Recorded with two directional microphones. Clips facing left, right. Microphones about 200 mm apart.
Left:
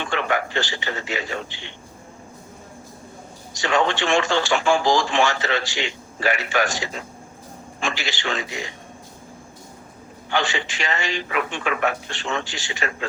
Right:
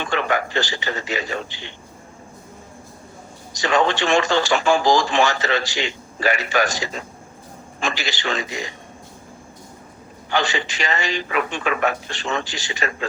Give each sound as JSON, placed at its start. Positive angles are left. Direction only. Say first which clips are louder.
{"t": 0.0, "sound": "speech", "louder": "right 2 dB", "side_deg": -40}
{"t": 3.5, "sound": "speech", "louder": "right 2 dB", "side_deg": -40}
{"t": 10.3, "sound": "speech", "louder": "right 2 dB", "side_deg": -40}